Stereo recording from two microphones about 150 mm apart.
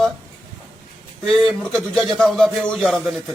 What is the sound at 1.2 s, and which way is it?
Speech, centre (ahead or behind).